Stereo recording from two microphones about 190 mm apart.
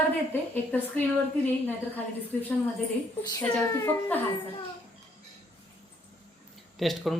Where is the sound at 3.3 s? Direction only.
15° left (ahead or behind).